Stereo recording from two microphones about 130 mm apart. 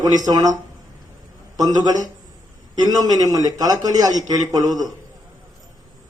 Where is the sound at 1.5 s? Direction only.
30° right (ahead or behind).